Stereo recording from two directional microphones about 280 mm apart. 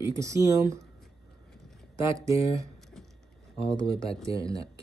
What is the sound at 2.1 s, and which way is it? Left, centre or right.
Speech, centre.